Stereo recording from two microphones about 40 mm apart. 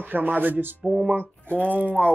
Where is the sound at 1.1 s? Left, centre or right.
Right.